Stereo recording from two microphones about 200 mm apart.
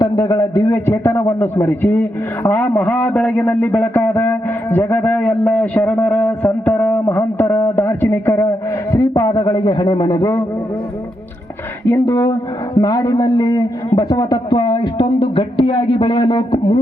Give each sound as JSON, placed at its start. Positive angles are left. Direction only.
{"t": 0.0, "sound": "a man's voice", "side_deg": 20}
{"t": 11.9, "sound": "a man's voice", "side_deg": 15}